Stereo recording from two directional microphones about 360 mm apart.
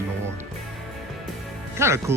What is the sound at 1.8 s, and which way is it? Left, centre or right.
Speech, centre.